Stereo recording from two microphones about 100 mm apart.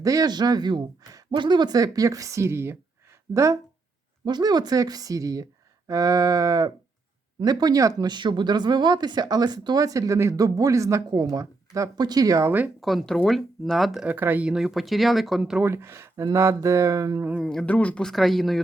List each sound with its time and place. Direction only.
0.0 s speech: 35° right (ahead or behind)
4.3 s speech: 45° right (ahead or behind)
8.1 s speech: 50° right (ahead or behind); by 12.5 s 35° right (ahead or behind)
12.5 s speech: 20° right (ahead or behind)
12.8 s speech: centre (ahead or behind)
14.0 s speech: 20° right (ahead or behind)
15.6 s speech: 25° right (ahead or behind)
17.4 s speech: 5° left (ahead or behind)
17.7 s speech: 15° left (ahead or behind)
18.1 s speech: centre (ahead or behind)